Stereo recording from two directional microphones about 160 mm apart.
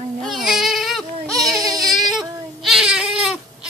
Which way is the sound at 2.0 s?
Centre (ahead or behind).